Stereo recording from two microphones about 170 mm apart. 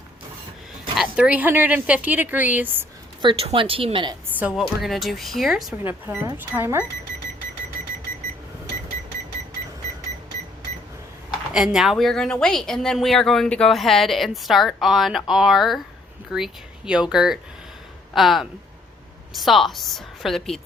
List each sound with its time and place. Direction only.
0.9 s a woman's voice: 5° right (ahead or behind)
3.2 s speech: 30° right (ahead or behind)
4.4 s a woman's voice: 5° right (ahead or behind)
5.8 s a woman's voice: 10° right (ahead or behind)
11.5 s speech: 5° right (ahead or behind)